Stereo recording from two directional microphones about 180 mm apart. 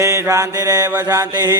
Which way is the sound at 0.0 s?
15° right (ahead or behind).